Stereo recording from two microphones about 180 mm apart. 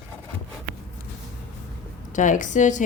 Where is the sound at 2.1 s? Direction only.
45° left (ahead or behind).